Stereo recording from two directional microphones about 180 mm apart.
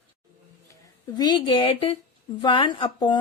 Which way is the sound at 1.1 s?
25° left (ahead or behind).